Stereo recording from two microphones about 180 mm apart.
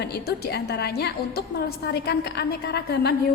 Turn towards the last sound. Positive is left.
turn(degrees=65)  # may be behind; listen again after turning